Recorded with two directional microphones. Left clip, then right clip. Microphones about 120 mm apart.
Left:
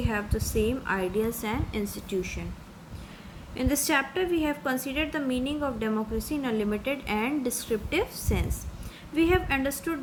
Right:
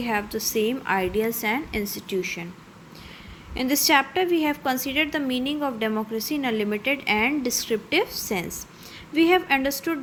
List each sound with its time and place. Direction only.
0.0 s a woman's voice: 35° right (ahead or behind)
3.5 s a woman's voice: 25° right (ahead or behind)